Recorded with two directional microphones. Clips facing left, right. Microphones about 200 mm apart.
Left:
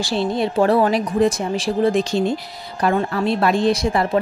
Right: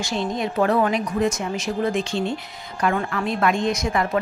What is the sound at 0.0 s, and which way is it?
Speech, 30° left (ahead or behind).